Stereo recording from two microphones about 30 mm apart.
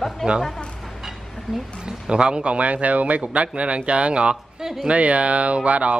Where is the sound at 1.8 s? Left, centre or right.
Right.